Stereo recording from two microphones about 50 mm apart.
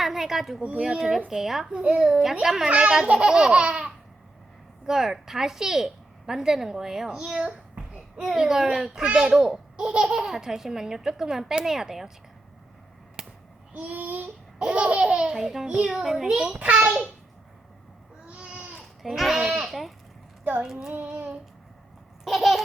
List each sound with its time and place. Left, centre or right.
0.0 s a sound: centre
0.8 s speech: centre
1.7 s speech: centre
2.4 s speech: centre
7.3 s babbling: centre
8.3 s speech: centre
13.2 s a sound: centre
13.7 s babbling: right
14.6 s speech: right
18.3 s a sound: right
18.7 s speech: centre
21.0 s speech: right
22.2 s a sound: centre